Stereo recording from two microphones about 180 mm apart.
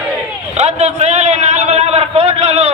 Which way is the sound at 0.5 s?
35° right (ahead or behind).